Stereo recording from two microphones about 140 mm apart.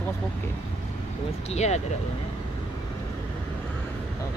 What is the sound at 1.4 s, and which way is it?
Speech, 50° left (ahead or behind).